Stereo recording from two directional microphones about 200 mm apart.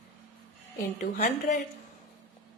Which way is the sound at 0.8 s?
45° left (ahead or behind).